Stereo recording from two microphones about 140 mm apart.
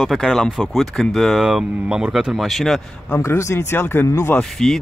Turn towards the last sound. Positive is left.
turn(degrees=5)  # may be behind; listen again after turning